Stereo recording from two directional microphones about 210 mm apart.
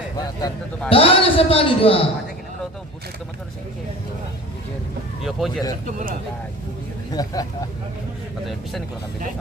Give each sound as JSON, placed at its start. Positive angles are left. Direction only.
{"t": 0.9, "sound": "a man's voice", "side_deg": 25}
{"t": 5.2, "sound": "speech", "side_deg": 0}
{"t": 7.1, "sound": "speech", "side_deg": 15}